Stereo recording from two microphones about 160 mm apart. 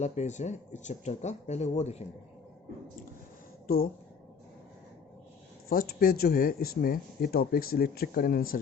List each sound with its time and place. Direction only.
0.0 s speech: 45° left (ahead or behind)
5.6 s speech: 65° left (ahead or behind)